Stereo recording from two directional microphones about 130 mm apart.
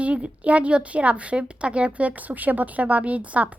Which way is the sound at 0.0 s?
10° right (ahead or behind).